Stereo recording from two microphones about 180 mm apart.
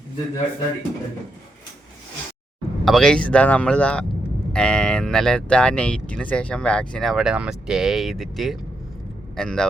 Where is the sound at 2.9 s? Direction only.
5° left (ahead or behind).